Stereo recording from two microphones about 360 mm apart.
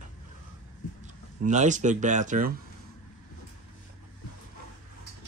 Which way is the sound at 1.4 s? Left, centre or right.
Centre.